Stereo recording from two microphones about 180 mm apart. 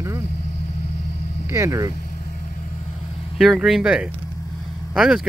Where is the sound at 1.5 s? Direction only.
15° right (ahead or behind).